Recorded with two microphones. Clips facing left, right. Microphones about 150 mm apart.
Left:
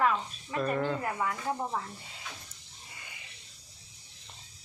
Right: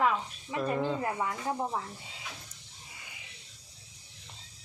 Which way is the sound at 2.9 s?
Centre (ahead or behind).